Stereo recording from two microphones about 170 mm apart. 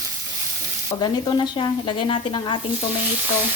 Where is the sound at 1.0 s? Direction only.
25° left (ahead or behind).